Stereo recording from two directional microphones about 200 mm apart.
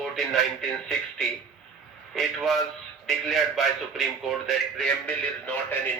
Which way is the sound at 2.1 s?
Centre (ahead or behind).